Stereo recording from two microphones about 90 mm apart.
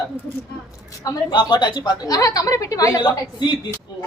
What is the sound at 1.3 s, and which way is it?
A woman's voice, 55° left (ahead or behind).